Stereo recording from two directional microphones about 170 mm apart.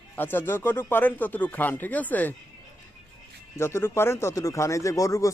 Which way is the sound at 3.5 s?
15° left (ahead or behind).